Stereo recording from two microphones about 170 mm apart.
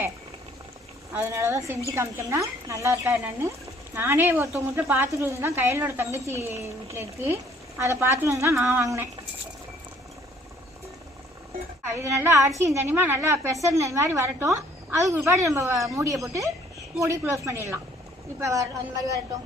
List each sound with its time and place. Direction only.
1.1 s a woman's voice: 15° right (ahead or behind)
11.9 s a woman's voice: 15° right (ahead or behind)